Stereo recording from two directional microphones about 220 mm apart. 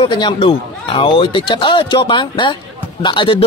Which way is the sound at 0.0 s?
20° left (ahead or behind).